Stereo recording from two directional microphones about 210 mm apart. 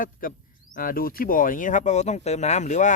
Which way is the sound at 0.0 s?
40° left (ahead or behind).